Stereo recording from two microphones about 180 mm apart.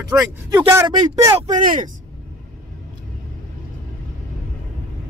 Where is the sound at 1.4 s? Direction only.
45° right (ahead or behind).